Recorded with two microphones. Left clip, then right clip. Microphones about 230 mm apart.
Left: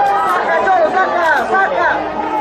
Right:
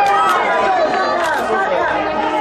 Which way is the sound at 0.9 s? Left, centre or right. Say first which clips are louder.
Left 3 dB; centre.